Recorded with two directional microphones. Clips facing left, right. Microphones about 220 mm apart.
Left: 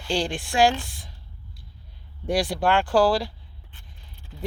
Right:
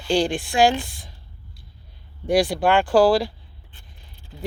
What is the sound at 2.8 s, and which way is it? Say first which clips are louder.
Speech: right 5 dB; 20° right (ahead or behind).